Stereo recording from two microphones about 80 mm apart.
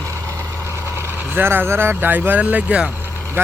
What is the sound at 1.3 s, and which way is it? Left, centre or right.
Speech, right.